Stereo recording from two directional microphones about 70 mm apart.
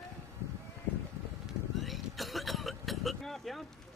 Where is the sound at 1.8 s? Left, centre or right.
Centre.